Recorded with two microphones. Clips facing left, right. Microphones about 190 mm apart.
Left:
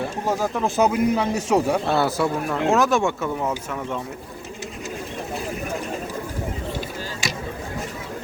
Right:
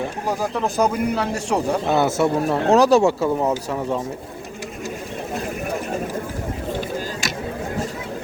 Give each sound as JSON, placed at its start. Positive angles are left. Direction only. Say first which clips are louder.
{"t": 0.3, "sound": "speech", "louder": "even", "side_deg": 0}
{"t": 1.9, "sound": "speech", "louder": "right 3 dB", "side_deg": -20}